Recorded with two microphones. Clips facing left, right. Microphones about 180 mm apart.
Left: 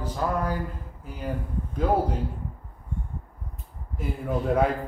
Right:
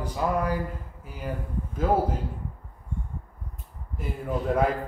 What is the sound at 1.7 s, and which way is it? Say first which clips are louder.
Speech: even; centre (ahead or behind).